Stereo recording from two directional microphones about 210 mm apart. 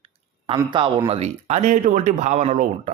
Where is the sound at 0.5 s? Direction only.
20° right (ahead or behind).